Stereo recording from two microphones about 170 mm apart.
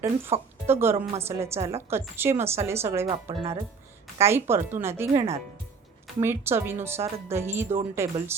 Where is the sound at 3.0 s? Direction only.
30° right (ahead or behind).